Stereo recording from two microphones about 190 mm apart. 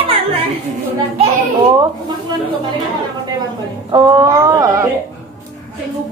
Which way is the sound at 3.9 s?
20° right (ahead or behind).